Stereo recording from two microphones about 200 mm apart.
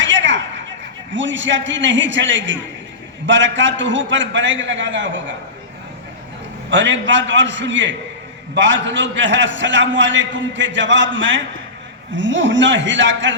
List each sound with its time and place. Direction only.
0.0 s a sound: 65° right (ahead or behind)
1.1 s a man's voice: 65° right (ahead or behind)
6.7 s a man's voice: 65° right (ahead or behind)